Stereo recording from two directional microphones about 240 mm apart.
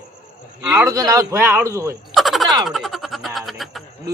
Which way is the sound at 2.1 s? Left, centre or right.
Centre.